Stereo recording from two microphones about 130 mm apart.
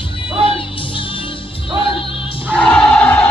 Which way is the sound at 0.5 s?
45° left (ahead or behind).